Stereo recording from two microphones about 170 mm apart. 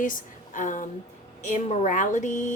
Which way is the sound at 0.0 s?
50° left (ahead or behind).